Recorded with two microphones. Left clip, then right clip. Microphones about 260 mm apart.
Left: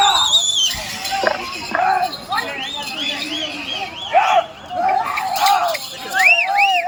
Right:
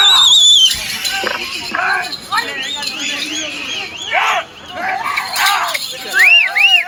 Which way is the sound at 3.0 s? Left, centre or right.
Centre.